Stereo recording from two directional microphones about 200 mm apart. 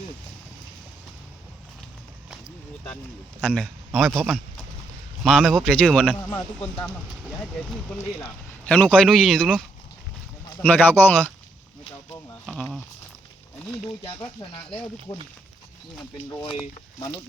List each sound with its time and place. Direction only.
3.4 s a man's voice: 5° left (ahead or behind)
8.6 s speech: 5° left (ahead or behind)
12.5 s speech: 5° left (ahead or behind)
15.1 s speech: 20° left (ahead or behind)